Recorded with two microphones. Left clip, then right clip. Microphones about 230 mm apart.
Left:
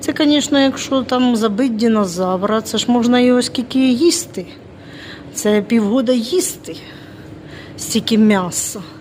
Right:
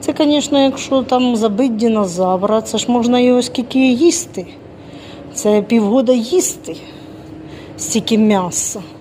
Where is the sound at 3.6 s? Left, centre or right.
Left.